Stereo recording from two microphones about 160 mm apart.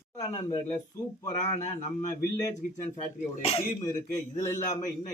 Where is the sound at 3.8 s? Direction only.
20° left (ahead or behind).